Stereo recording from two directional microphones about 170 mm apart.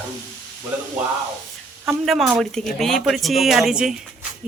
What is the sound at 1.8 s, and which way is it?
A man's voice, centre (ahead or behind).